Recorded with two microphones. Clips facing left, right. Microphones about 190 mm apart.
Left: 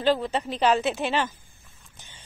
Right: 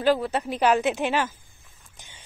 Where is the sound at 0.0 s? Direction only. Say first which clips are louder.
Right 1 dB; 10° right (ahead or behind).